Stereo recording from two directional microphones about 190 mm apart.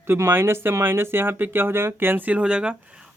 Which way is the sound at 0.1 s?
10° right (ahead or behind).